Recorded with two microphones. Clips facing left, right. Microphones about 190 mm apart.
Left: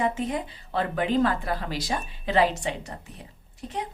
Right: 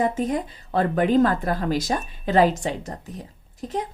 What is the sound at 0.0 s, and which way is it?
A woman's voice, 45° right (ahead or behind).